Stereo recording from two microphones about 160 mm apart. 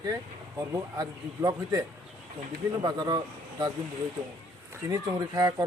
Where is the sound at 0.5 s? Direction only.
20° right (ahead or behind).